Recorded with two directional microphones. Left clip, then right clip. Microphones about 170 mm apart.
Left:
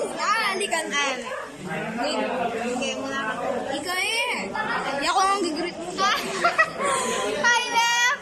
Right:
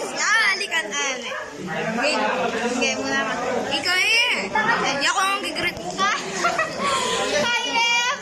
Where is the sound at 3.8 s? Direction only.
15° left (ahead or behind).